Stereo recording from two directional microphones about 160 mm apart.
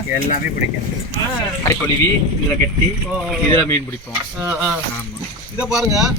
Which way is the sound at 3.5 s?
20° left (ahead or behind).